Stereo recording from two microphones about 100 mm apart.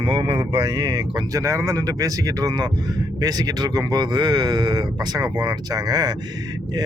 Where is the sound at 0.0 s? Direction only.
60° right (ahead or behind).